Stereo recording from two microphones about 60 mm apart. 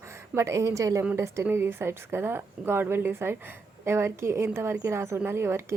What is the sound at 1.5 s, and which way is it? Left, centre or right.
A woman's voice, right.